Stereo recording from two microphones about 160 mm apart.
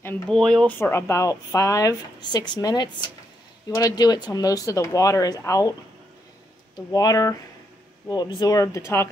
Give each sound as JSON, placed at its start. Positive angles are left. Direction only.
{"t": 0.0, "sound": "speech", "side_deg": 10}
{"t": 0.7, "sound": "a woman's voice", "side_deg": 15}
{"t": 6.9, "sound": "a woman's voice", "side_deg": 25}
{"t": 8.4, "sound": "a woman's voice", "side_deg": 20}